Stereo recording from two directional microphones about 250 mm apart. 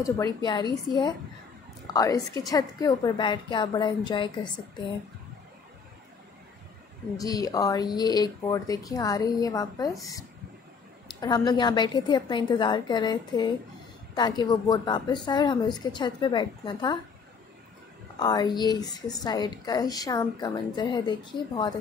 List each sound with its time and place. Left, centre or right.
0.0 s a woman's voice: centre
2.0 s a woman's voice: centre
7.2 s a woman's voice: centre
11.1 s a woman's voice: centre
18.2 s a woman's voice: centre